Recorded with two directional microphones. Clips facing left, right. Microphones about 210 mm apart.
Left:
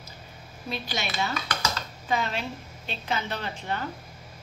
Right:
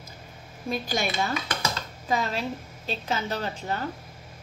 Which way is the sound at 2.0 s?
35° right (ahead or behind).